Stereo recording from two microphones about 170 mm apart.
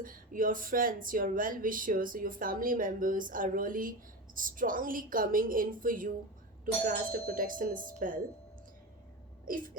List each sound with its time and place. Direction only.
0.0 s speech: 55° right (ahead or behind)
9.5 s speech: 55° right (ahead or behind)